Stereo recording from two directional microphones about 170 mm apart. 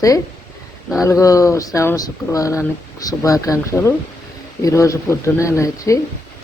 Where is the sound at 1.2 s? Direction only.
20° left (ahead or behind).